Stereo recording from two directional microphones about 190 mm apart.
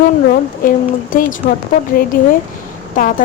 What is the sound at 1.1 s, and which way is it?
A woman's voice, 45° left (ahead or behind).